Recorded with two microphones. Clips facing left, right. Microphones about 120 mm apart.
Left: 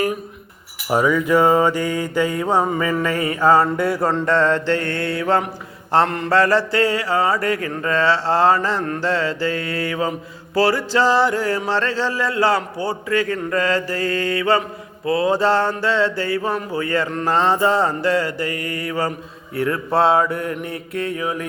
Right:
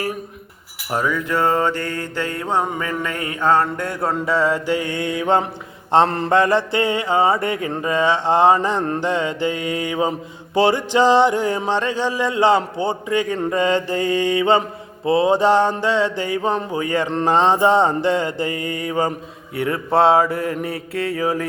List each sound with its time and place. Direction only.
0.9 s mantra: 5° left (ahead or behind)
4.1 s mantra: 5° right (ahead or behind)
6.1 s mantra: 35° right (ahead or behind)
6.3 s mantra: 20° right (ahead or behind)
8.8 s mantra: 30° right (ahead or behind)
9.0 s mantra: 20° right (ahead or behind); by 21.4 s 35° right (ahead or behind)